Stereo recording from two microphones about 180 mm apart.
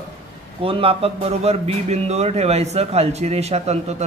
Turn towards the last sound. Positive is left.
turn(degrees=-35)  # may be behind; listen again after turning